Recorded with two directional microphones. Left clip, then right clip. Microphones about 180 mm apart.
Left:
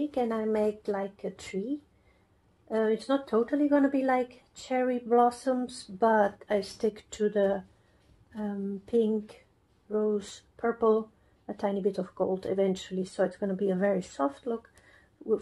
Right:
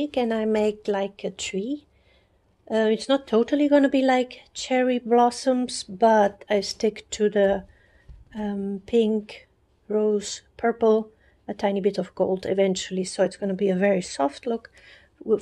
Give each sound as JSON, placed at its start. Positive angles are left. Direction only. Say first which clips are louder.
{"t": 0.1, "sound": "speech", "louder": "right 7 dB", "side_deg": -20}
{"t": 2.7, "sound": "speech", "louder": "right 6 dB", "side_deg": -20}